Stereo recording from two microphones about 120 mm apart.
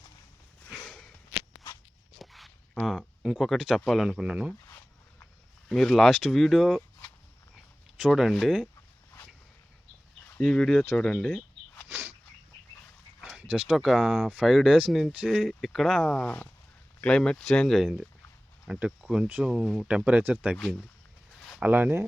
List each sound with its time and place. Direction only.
0.8 s a sound: 5° left (ahead or behind)
1.4 s a sound: 30° left (ahead or behind)
2.1 s dog: centre (ahead or behind)
2.8 s speech: centre (ahead or behind)
5.6 s speech: 5° left (ahead or behind)
7.9 s speech: 5° right (ahead or behind)
10.3 s speech: 5° left (ahead or behind)
13.2 s a sound: 10° right (ahead or behind)
13.7 s speech: centre (ahead or behind)
20.6 s speech: 5° left (ahead or behind)
21.6 s speech: 15° right (ahead or behind)